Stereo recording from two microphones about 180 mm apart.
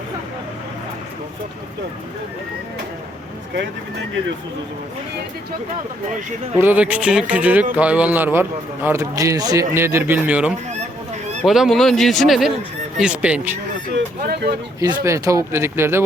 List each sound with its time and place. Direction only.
6.6 s speech: 10° right (ahead or behind)
14.3 s speech: 65° right (ahead or behind)
14.8 s speech: 15° right (ahead or behind)